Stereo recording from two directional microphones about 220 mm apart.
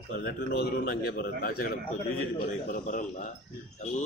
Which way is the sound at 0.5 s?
40° left (ahead or behind).